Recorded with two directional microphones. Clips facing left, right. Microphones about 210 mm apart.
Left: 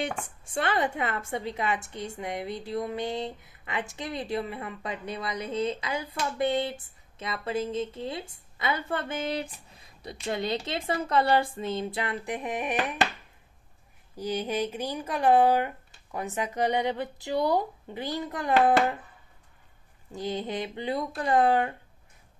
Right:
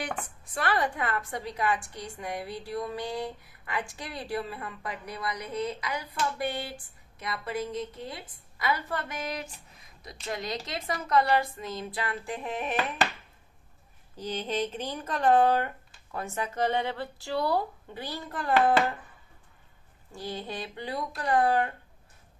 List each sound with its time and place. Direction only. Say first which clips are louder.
0.0 s a woman's voice: left 3 dB; 25° left (ahead or behind)
9.7 s a sound: left 6 dB; 30° left (ahead or behind)
10.2 s a woman's voice: left 5 dB; 30° left (ahead or behind)
14.1 s speech: left 2 dB; 10° left (ahead or behind)
20.1 s a woman's voice: left 5 dB; 20° left (ahead or behind)